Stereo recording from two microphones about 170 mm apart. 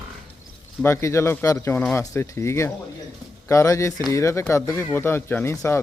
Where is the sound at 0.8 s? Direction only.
15° left (ahead or behind).